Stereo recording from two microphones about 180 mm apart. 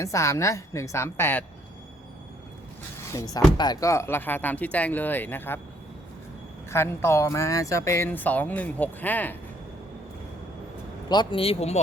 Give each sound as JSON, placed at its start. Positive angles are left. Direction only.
{"t": 0.0, "sound": "speech", "side_deg": 15}
{"t": 3.6, "sound": "speech", "side_deg": 20}
{"t": 6.7, "sound": "speech", "side_deg": 15}
{"t": 11.1, "sound": "speech", "side_deg": 25}